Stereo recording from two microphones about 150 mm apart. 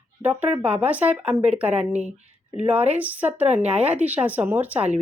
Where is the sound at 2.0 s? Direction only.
50° right (ahead or behind).